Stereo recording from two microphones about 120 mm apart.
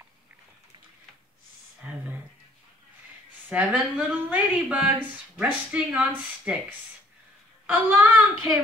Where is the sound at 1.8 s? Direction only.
10° right (ahead or behind).